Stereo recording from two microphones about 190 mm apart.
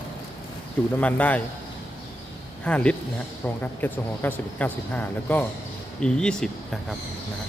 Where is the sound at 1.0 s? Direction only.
5° left (ahead or behind).